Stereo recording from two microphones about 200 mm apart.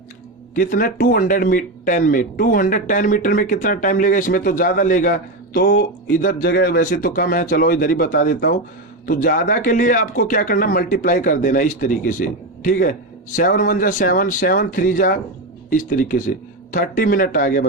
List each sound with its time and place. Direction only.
0.5 s speech: 45° left (ahead or behind)